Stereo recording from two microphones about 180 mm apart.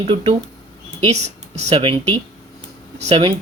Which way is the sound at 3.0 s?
35° right (ahead or behind).